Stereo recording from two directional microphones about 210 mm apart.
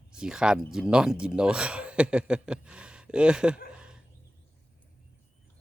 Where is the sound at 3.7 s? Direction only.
5° right (ahead or behind).